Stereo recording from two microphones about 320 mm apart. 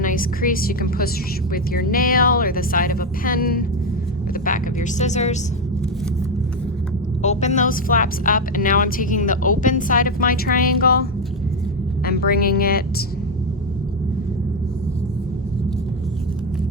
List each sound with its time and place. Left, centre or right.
0.0 s a woman's voice: left
7.2 s a woman's voice: left
12.0 s a woman's voice: left